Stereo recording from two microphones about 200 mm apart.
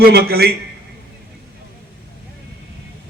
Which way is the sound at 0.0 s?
50° right (ahead or behind).